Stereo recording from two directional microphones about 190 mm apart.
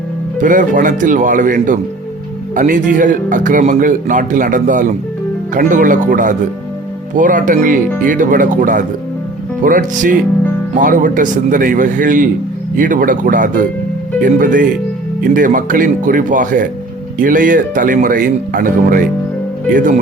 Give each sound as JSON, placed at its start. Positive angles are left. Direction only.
{"t": 0.3, "sound": "speech", "side_deg": -40}